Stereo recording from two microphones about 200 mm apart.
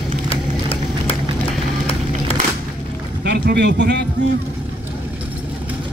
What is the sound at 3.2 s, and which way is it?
Speech, 55° right (ahead or behind).